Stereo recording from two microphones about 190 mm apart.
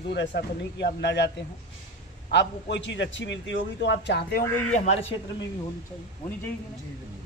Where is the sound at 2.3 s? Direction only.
65° left (ahead or behind).